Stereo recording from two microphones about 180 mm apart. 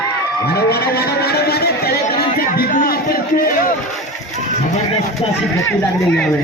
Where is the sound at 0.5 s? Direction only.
60° left (ahead or behind).